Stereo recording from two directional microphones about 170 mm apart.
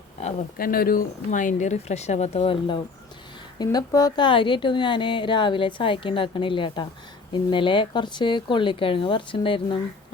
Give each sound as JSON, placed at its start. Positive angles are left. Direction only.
{"t": 0.6, "sound": "a woman's voice", "side_deg": 60}